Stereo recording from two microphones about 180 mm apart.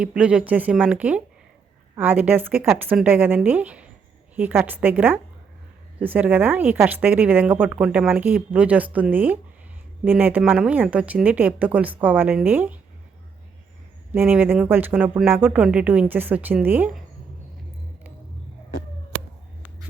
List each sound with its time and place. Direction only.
0.0 s speech: 5° right (ahead or behind)
14.1 s speech: 10° right (ahead or behind)